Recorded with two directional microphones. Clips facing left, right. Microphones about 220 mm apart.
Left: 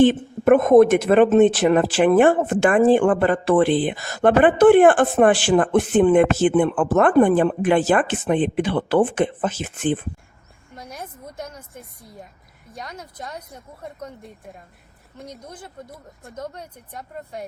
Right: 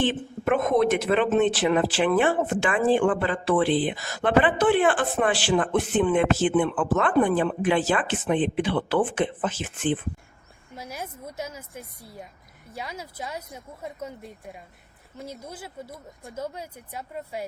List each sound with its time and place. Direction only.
0.0 s speech: 45° left (ahead or behind)
10.8 s speech: 5° right (ahead or behind)